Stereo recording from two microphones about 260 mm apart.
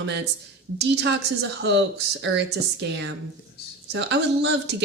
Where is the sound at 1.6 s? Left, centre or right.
Right.